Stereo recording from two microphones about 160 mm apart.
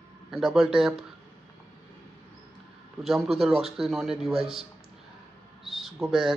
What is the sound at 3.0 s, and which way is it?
A man's voice, centre (ahead or behind).